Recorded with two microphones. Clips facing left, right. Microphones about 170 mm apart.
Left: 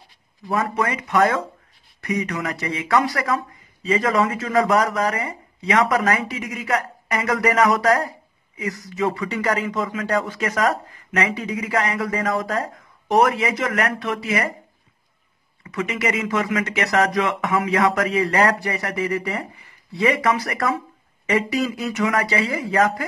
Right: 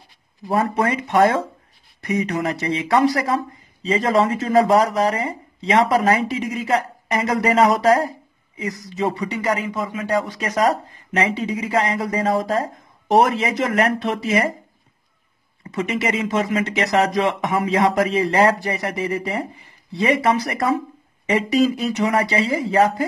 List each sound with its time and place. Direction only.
0.5 s speech: 30° right (ahead or behind)
15.6 s speech: 30° right (ahead or behind)